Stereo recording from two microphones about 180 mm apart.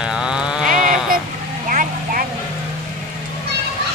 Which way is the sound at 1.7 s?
45° right (ahead or behind).